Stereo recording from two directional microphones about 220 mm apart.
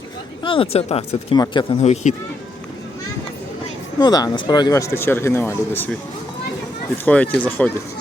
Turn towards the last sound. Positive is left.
turn(degrees=5)  # may be behind; listen again after turning